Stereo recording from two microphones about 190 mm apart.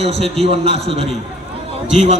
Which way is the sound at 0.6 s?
30° right (ahead or behind).